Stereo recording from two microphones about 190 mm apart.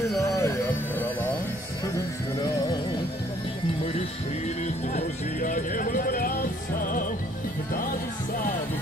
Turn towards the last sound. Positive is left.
turn(degrees=45)  # may be behind; listen again after turning